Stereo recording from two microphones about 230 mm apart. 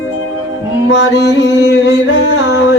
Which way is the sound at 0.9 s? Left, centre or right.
Left.